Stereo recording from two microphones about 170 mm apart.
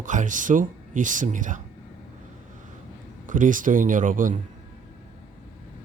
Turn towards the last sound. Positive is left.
turn(degrees=-50)  # may be behind; listen again after turning